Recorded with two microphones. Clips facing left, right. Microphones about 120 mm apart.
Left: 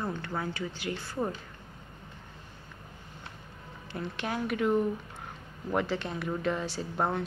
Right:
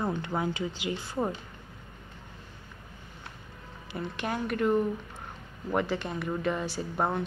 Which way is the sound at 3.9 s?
Centre (ahead or behind).